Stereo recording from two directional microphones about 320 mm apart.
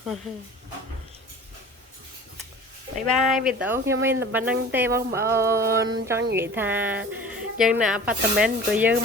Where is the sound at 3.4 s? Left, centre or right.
Centre.